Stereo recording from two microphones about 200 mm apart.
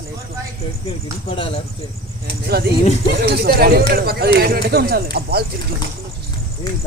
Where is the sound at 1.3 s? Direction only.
25° left (ahead or behind).